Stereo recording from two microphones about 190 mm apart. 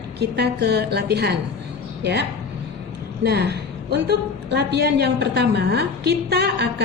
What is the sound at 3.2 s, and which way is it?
A woman's voice, 60° right (ahead or behind).